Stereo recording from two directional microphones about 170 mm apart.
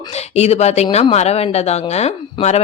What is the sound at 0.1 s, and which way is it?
Speech, 40° left (ahead or behind).